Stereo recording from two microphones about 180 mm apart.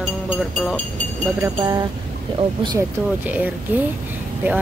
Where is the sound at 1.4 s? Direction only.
20° right (ahead or behind).